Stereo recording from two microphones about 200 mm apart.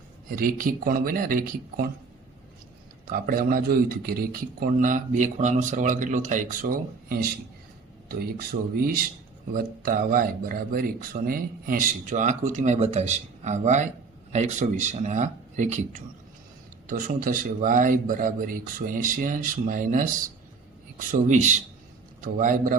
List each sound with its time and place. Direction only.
0.3 s speech: 45° right (ahead or behind)
3.1 s speech: 45° right (ahead or behind)
8.5 s speech: 50° right (ahead or behind)
21.1 s speech: 35° right (ahead or behind)